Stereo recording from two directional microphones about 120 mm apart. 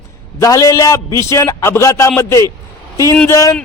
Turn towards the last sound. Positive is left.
turn(degrees=25)  # may be behind; listen again after turning